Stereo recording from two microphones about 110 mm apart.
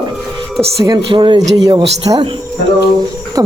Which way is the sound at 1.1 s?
50° right (ahead or behind).